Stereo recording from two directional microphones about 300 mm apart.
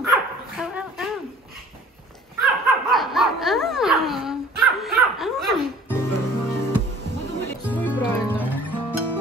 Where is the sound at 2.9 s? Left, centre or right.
Centre.